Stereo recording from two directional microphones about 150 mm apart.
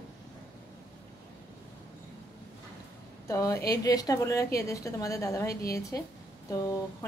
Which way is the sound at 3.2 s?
20° left (ahead or behind).